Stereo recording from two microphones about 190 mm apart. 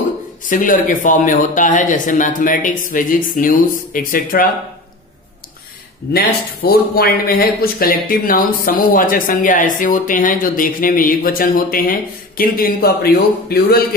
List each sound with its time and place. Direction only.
0.5 s speech: 45° left (ahead or behind)
6.1 s speech: 55° left (ahead or behind)